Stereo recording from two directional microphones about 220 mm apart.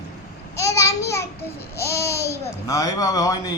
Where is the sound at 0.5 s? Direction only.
15° left (ahead or behind).